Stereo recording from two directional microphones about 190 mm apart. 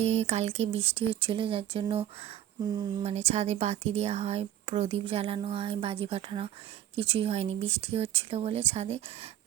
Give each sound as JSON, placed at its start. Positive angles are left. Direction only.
{"t": 0.0, "sound": "speech", "side_deg": -35}